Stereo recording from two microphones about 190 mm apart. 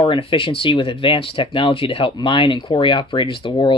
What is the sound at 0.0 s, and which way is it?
Speech, 30° left (ahead or behind).